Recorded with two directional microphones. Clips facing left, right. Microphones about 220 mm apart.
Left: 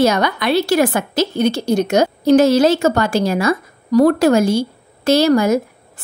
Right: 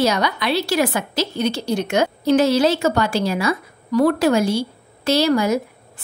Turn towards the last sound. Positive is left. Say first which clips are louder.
# left 4 dB
turn(degrees=45)  # may be behind; listen again after turning